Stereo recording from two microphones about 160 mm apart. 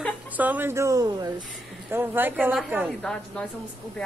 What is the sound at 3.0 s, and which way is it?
Speech, 5° left (ahead or behind).